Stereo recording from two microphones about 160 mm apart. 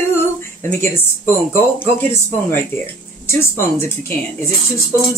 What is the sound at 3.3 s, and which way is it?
Speech, 15° left (ahead or behind).